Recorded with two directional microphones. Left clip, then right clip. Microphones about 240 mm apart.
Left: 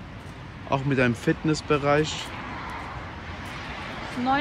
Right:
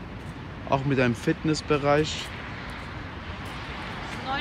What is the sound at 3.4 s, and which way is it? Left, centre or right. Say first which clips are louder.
Vehicle: left 1 dB; left.